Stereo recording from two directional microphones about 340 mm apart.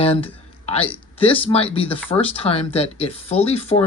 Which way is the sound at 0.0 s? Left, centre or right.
Centre.